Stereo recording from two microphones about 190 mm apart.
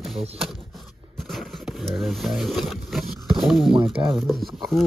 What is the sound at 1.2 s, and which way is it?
Speech, centre (ahead or behind).